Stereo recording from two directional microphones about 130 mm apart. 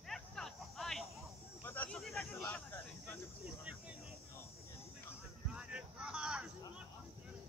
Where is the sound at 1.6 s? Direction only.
15° left (ahead or behind).